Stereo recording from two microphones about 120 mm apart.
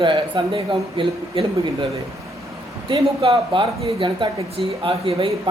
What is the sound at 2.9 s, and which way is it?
Speech, 45° right (ahead or behind).